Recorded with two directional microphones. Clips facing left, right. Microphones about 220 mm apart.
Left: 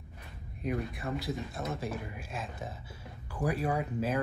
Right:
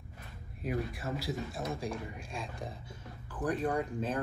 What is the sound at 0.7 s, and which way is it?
Speech, centre (ahead or behind).